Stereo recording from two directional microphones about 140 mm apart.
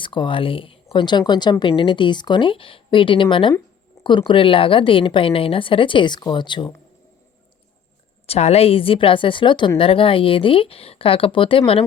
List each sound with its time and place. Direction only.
0.0 s a woman's voice: 35° left (ahead or behind)
8.3 s a woman's voice: 50° left (ahead or behind)